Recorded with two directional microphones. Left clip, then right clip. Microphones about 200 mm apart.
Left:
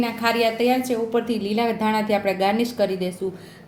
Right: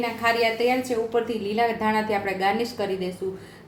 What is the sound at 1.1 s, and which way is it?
A woman's voice, 40° left (ahead or behind).